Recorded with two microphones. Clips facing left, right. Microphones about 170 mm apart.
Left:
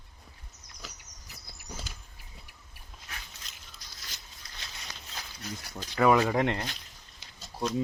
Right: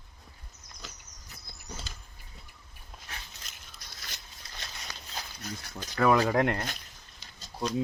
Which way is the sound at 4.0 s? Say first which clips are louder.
Right 3 dB; 60° right (ahead or behind).